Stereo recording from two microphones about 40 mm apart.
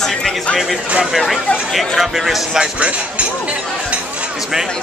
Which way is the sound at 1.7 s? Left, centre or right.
Centre.